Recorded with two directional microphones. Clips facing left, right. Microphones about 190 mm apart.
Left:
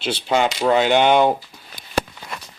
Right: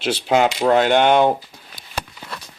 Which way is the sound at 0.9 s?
Centre (ahead or behind).